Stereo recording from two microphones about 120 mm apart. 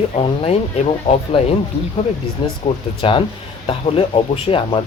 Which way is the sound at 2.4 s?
45° left (ahead or behind).